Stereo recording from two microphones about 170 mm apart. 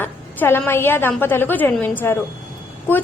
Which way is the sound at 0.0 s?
10° left (ahead or behind).